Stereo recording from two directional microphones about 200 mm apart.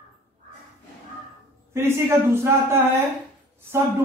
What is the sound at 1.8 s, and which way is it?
A man's voice, 10° right (ahead or behind).